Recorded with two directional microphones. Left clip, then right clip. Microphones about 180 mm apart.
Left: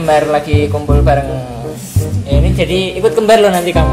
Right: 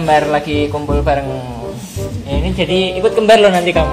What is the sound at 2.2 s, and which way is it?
Speech, 20° left (ahead or behind).